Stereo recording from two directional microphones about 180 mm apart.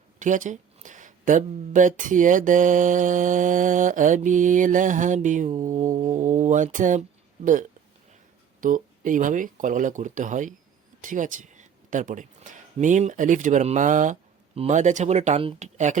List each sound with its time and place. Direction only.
0.2 s speech: 45° right (ahead or behind)
8.6 s speech: 45° right (ahead or behind)